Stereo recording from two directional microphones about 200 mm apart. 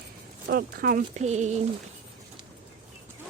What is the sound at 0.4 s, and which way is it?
Speech, 50° right (ahead or behind).